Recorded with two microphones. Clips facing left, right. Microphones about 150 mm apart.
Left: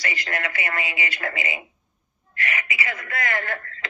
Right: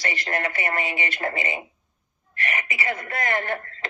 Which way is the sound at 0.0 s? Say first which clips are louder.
Right 2 dB; 30° right (ahead or behind).